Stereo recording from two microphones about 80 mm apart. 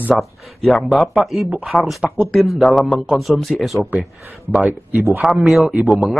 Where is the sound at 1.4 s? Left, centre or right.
Centre.